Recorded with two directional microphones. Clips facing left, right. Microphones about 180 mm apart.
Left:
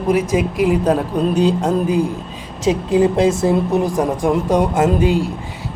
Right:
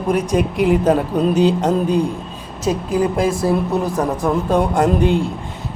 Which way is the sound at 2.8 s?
20° left (ahead or behind).